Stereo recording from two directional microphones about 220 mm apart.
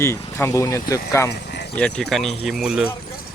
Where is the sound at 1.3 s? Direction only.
50° left (ahead or behind).